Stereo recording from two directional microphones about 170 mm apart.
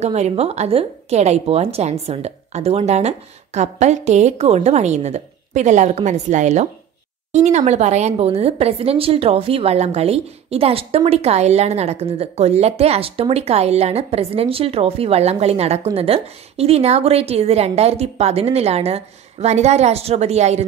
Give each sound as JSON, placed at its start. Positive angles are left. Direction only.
{"t": 0.0, "sound": "a woman's voice", "side_deg": -40}